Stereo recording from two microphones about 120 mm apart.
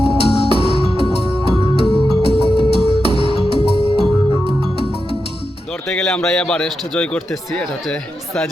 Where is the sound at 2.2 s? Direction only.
55° left (ahead or behind).